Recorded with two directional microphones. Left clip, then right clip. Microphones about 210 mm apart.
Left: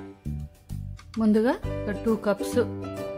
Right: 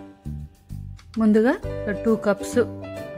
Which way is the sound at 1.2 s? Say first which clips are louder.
Right 4 dB; 15° right (ahead or behind).